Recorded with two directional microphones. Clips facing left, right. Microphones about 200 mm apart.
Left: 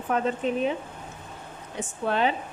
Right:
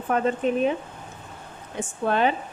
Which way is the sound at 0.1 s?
50° right (ahead or behind).